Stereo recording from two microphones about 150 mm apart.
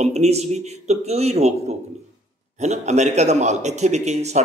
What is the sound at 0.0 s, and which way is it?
A man's voice, 45° right (ahead or behind).